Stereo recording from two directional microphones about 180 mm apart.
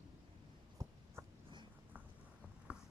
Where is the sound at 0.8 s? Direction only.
20° right (ahead or behind).